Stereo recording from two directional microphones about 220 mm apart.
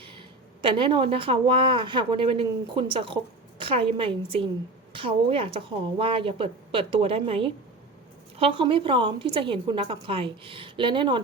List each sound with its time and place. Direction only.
0.6 s a woman's voice: 20° right (ahead or behind)